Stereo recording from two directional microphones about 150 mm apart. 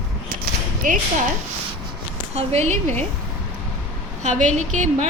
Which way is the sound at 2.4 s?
45° right (ahead or behind).